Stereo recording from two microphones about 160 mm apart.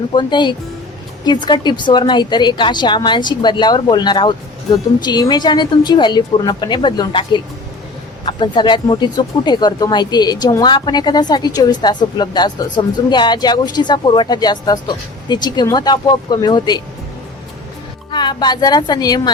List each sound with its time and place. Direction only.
0.1 s speech: 30° left (ahead or behind)
18.1 s speech: 30° left (ahead or behind)